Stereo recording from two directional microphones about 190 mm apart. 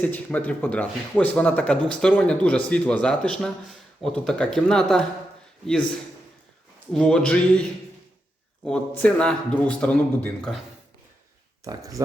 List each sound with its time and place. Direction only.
0.0 s speech: 10° left (ahead or behind)
6.9 s speech: 5° left (ahead or behind)
8.6 s speech: 5° left (ahead or behind)
11.6 s speech: 20° right (ahead or behind)